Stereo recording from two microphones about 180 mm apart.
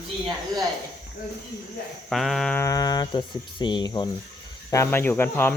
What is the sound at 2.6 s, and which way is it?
Speech, 20° left (ahead or behind).